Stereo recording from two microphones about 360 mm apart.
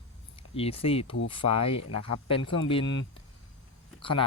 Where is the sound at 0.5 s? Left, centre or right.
Centre.